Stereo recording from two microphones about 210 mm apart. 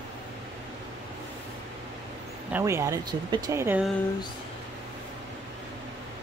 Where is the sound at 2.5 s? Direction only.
10° right (ahead or behind).